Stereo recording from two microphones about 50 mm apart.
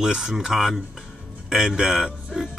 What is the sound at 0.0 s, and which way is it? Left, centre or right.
A man's voice, centre.